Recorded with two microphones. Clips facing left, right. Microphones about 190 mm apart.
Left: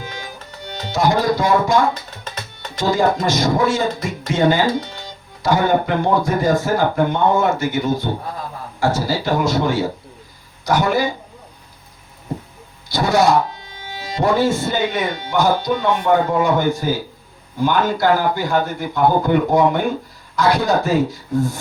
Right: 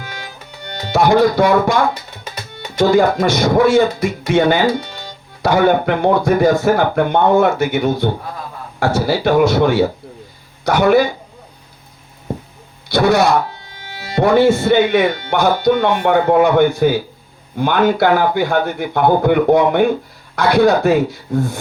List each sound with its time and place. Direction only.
0.7 s speech: 65° right (ahead or behind)
1.9 s tabla: 10° right (ahead or behind)
2.7 s speech: 60° right (ahead or behind)
12.9 s speech: 60° right (ahead or behind)